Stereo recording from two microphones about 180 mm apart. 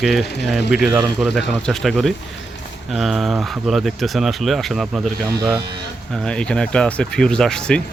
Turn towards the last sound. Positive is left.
turn(degrees=5)  # may be behind; listen again after turning